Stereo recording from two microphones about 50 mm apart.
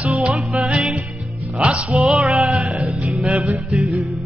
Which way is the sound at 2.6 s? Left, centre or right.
Centre.